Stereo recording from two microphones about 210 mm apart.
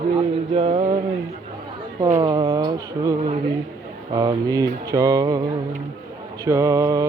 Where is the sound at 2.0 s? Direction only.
20° right (ahead or behind).